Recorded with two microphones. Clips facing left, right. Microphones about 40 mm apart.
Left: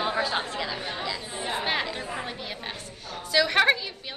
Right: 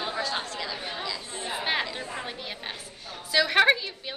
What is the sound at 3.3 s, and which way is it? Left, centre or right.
Speech, centre.